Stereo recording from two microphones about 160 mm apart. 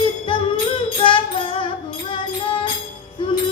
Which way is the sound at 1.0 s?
30° left (ahead or behind).